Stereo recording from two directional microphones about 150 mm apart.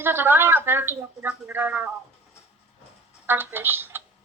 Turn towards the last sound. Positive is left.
turn(degrees=-15)  # may be behind; listen again after turning